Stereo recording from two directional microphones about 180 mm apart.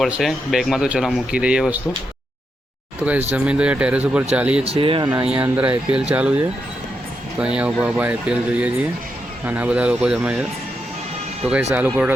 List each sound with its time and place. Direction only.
0.0 s speech: centre (ahead or behind)
3.3 s speech: 5° right (ahead or behind)
4.6 s speech: 30° right (ahead or behind)
5.3 s speech: 10° right (ahead or behind)
11.7 s speech: 10° right (ahead or behind)